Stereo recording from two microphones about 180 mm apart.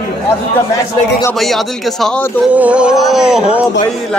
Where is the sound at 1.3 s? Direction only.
Centre (ahead or behind).